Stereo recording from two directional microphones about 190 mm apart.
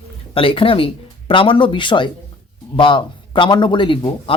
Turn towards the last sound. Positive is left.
turn(degrees=25)  # may be behind; listen again after turning